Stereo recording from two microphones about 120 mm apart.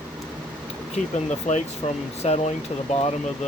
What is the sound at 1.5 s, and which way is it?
Speech, 85° left.